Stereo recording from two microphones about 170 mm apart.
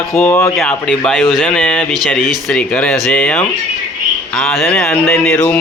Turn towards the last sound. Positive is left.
turn(degrees=10)  # may be behind; listen again after turning